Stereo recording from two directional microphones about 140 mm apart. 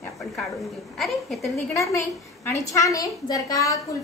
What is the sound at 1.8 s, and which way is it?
A woman's voice, 20° left (ahead or behind).